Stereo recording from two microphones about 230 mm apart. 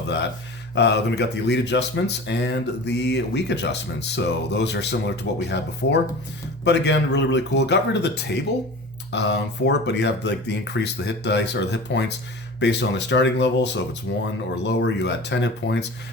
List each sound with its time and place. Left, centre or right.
0.8 s speech: left